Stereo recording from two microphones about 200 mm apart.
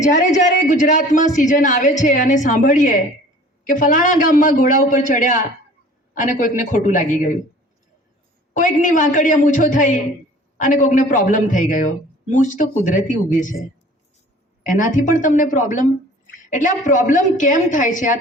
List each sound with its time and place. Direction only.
0.0 s speech: 40° left (ahead or behind)
8.5 s speech: 40° left (ahead or behind)
14.6 s speech: 40° left (ahead or behind)